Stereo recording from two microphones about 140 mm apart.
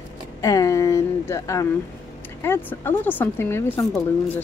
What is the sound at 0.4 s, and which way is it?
Speech, 25° left (ahead or behind).